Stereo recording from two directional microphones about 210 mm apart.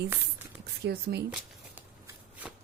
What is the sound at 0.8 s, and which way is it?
Speech, 50° right (ahead or behind).